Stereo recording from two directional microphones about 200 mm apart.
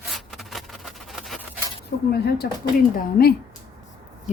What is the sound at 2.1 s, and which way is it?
A woman's voice, 50° left (ahead or behind).